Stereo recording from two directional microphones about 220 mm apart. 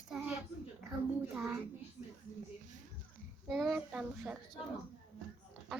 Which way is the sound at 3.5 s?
Centre (ahead or behind).